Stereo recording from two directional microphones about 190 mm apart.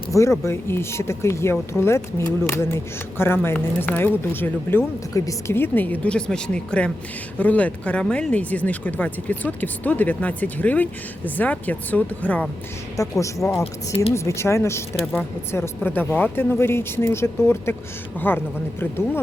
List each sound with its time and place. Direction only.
0.1 s speech: 15° left (ahead or behind)